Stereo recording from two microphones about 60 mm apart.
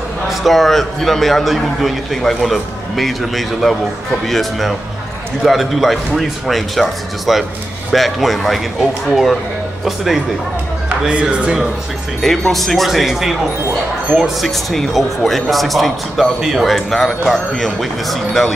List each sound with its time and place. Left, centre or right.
0.3 s a man's voice: centre
11.1 s speech: centre
12.2 s a man's voice: centre